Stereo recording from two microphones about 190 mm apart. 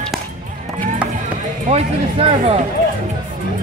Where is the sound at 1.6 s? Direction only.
35° right (ahead or behind).